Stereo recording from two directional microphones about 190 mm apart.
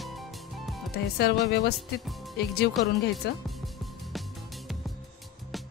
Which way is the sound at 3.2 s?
60° left (ahead or behind).